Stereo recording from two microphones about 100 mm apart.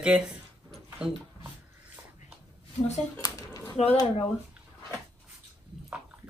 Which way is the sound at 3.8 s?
90° left.